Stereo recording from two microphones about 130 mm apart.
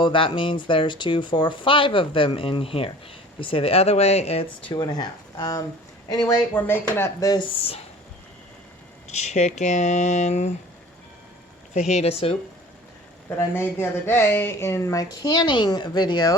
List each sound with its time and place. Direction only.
0.0 s speech: 40° left (ahead or behind)
4.7 s speech: 35° left (ahead or behind)
6.5 s speech: 15° left (ahead or behind)
9.0 s speech: 60° left (ahead or behind)
11.7 s speech: 60° left (ahead or behind)
13.3 s speech: 15° left (ahead or behind); by 16.3 s 35° left (ahead or behind)